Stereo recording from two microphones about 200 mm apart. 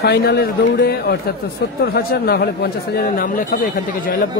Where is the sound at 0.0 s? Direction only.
55° left (ahead or behind).